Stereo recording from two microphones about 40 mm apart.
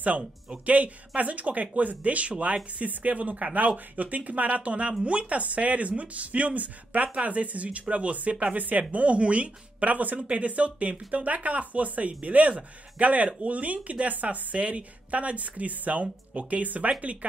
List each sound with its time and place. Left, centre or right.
0.7 s speech: right